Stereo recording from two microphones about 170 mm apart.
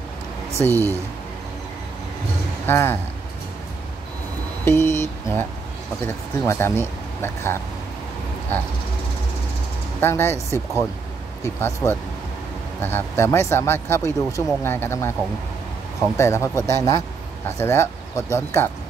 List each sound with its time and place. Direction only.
0.6 s speech: 15° right (ahead or behind)
2.6 s speech: 15° left (ahead or behind)
4.6 s speech: 15° left (ahead or behind)
9.9 s speech: 15° left (ahead or behind)
11.4 s speech: 15° left (ahead or behind)
16.2 s speech: 15° left (ahead or behind)